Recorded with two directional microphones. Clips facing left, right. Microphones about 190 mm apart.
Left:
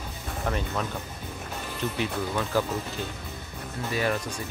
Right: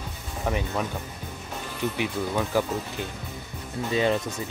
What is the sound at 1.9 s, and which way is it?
Speech, 15° right (ahead or behind).